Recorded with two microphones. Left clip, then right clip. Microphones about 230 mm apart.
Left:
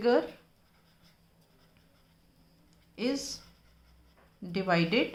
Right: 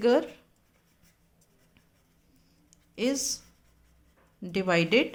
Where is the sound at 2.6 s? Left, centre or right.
Right.